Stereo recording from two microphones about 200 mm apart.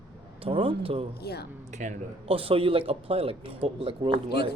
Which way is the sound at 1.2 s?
55° left (ahead or behind).